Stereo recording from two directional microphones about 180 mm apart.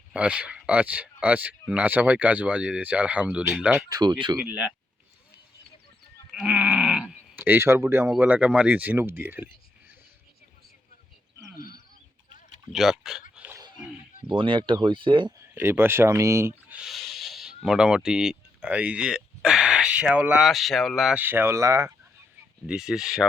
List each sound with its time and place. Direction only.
0.1 s speech: 5° right (ahead or behind)
3.8 s speech: 20° right (ahead or behind)
4.4 s speech: 10° right (ahead or behind)
6.3 s speech: 5° right (ahead or behind)
11.3 s a sound: 15° right (ahead or behind)
12.7 s speech: 5° right (ahead or behind)
13.3 s a sound: 10° right (ahead or behind)
14.3 s speech: 30° right (ahead or behind)
15.5 s speech: 10° right (ahead or behind)
22.6 s speech: 5° right (ahead or behind)